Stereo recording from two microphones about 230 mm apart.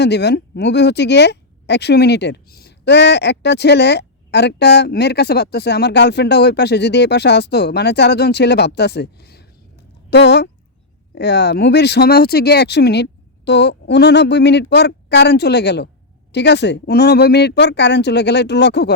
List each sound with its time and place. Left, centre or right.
0.0 s speech: left